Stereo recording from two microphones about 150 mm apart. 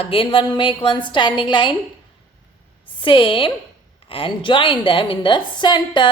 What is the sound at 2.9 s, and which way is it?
A woman's voice, 35° left (ahead or behind).